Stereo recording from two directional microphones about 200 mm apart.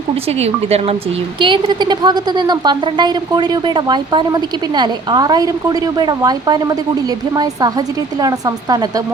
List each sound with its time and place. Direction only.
0.3 s a woman's voice: 30° right (ahead or behind)